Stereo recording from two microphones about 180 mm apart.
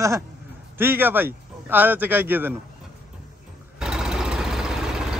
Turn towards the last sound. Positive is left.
turn(degrees=-5)  # may be behind; listen again after turning